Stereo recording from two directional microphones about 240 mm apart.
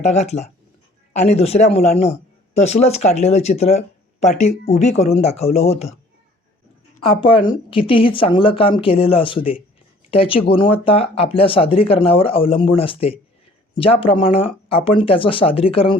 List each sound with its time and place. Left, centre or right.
0.0 s speech: left
7.0 s speech: left